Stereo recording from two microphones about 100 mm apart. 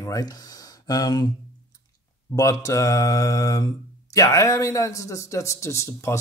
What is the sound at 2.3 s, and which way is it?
Speech, 35° left (ahead or behind).